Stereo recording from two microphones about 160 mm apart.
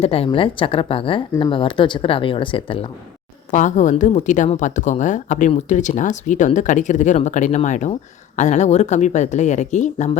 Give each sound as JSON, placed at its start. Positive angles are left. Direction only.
{"t": 0.0, "sound": "speech", "side_deg": 35}
{"t": 3.5, "sound": "a woman's voice", "side_deg": 50}